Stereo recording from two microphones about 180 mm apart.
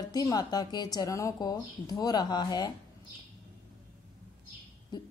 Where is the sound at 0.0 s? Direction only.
20° left (ahead or behind).